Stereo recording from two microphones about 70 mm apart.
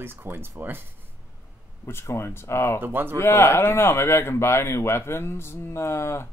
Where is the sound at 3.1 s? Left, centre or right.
Left.